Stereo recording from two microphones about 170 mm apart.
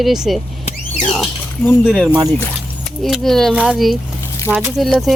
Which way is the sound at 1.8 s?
5° right (ahead or behind).